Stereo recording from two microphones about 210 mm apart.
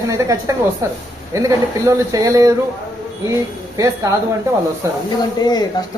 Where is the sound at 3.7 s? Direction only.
15° right (ahead or behind).